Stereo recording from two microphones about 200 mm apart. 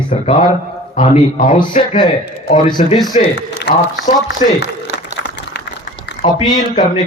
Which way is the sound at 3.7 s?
55° left (ahead or behind).